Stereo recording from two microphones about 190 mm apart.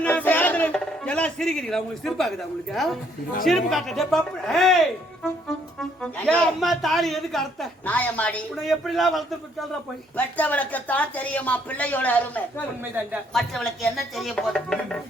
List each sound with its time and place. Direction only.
0.0 s music: 10° left (ahead or behind)
2.7 s a man's voice: centre (ahead or behind)
5.8 s a man's voice: 5° left (ahead or behind)